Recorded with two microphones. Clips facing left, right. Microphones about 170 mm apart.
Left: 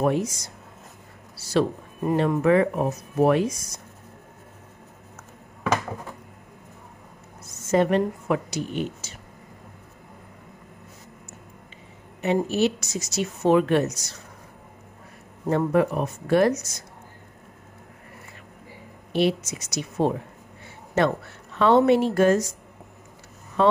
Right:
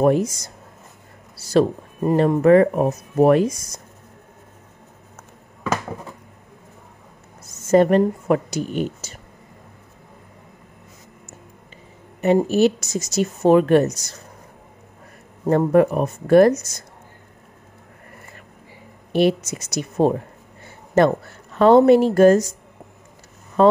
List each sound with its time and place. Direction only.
0.0 s speech: 45° right (ahead or behind)
1.5 s speech: 40° right (ahead or behind)
7.7 s speech: 45° right (ahead or behind)
12.2 s speech: 45° right (ahead or behind)
15.4 s speech: 45° right (ahead or behind)
19.1 s speech: 50° right (ahead or behind)
20.6 s a sound: 45° right (ahead or behind)
21.5 s speech: 40° right (ahead or behind)
23.6 s speech: 45° right (ahead or behind)